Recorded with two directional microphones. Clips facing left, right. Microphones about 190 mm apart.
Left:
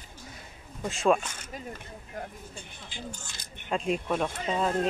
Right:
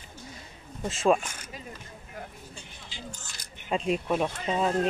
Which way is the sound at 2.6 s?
50° left (ahead or behind).